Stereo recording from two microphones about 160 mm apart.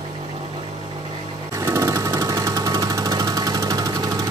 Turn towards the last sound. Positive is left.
turn(degrees=-20)  # may be behind; listen again after turning